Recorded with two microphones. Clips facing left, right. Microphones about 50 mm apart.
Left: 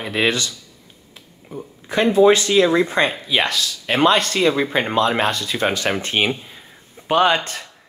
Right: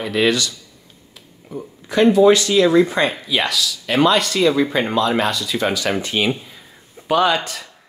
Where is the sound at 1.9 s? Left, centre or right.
Left.